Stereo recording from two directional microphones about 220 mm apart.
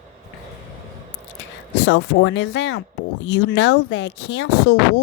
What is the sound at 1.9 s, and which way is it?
Speech, 55° left (ahead or behind).